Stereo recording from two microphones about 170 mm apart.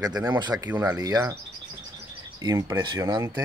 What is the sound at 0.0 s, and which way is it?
Speech, 25° right (ahead or behind).